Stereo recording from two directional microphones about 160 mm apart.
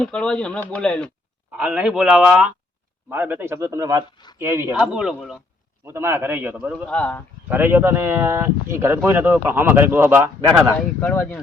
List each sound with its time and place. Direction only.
0.0 s speech: 5° left (ahead or behind)
1.5 s speech: 10° right (ahead or behind)
4.7 s speech: 5° right (ahead or behind)
5.8 s speech: 15° right (ahead or behind)
6.8 s speech: 10° left (ahead or behind)
7.5 s speech: 15° right (ahead or behind)
10.6 s speech: 5° left (ahead or behind)